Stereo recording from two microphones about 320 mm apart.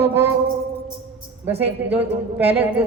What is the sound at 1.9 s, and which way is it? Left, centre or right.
Speech, centre.